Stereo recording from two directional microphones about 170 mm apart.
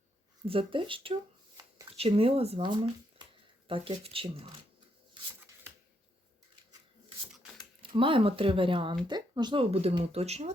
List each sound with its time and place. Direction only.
0.4 s speech: 30° right (ahead or behind)
7.8 s speech: 30° right (ahead or behind)